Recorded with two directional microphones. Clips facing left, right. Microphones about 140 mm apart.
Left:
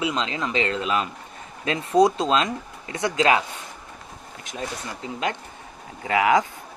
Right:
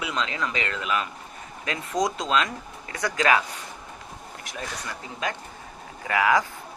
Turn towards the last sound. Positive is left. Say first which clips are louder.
# left 3 dB
turn(degrees=20)  # may be behind; listen again after turning